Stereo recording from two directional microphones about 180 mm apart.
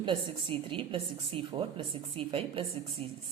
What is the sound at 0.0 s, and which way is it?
A woman's voice, 30° right (ahead or behind).